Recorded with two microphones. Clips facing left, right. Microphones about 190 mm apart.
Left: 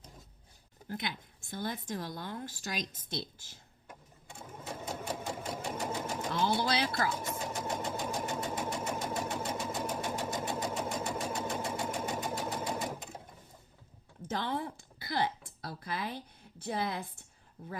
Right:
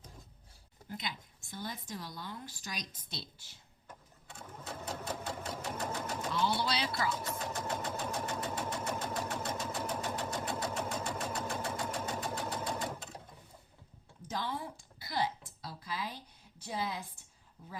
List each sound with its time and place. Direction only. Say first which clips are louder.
0.9 s a woman's voice: left 4 dB; 55° left (ahead or behind)
3.8 s sewing machine: left 1 dB; 10° left (ahead or behind)
6.3 s music: left 3 dB; 50° left (ahead or behind)
7.3 s sewing machine: left 1 dB; 10° left (ahead or behind)
7.9 s engine: left 2 dB; 15° left (ahead or behind)
14.3 s a sound: left 4 dB; 60° left (ahead or behind)